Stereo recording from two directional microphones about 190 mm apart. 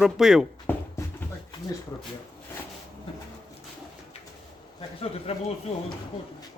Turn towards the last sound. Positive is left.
turn(degrees=30)  # may be behind; listen again after turning